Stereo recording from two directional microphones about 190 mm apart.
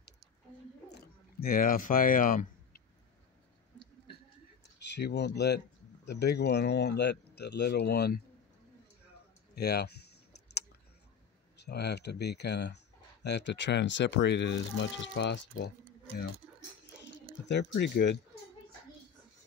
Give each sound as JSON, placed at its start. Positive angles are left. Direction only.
{"t": 0.9, "sound": "a sound", "side_deg": 50}
{"t": 4.7, "sound": "speech", "side_deg": 65}
{"t": 9.6, "sound": "computer keyboard", "side_deg": 55}
{"t": 11.5, "sound": "speech", "side_deg": 60}
{"t": 17.0, "sound": "speech", "side_deg": 65}